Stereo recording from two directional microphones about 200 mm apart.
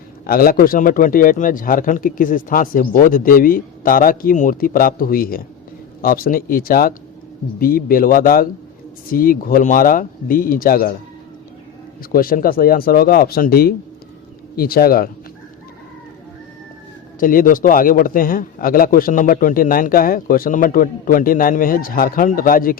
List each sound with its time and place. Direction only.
0.3 s a man's voice: 45° left (ahead or behind)
12.1 s a man's voice: 45° left (ahead or behind)
17.2 s a man's voice: 45° left (ahead or behind)